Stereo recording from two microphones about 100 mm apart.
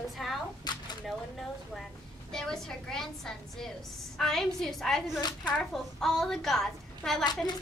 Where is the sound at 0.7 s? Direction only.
45° left (ahead or behind).